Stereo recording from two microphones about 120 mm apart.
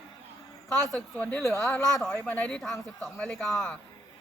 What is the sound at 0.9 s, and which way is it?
Speech, 10° left (ahead or behind).